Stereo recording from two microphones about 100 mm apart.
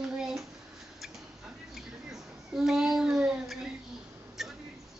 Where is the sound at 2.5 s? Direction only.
5° right (ahead or behind).